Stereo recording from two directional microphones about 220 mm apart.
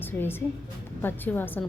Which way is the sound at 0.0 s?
10° left (ahead or behind).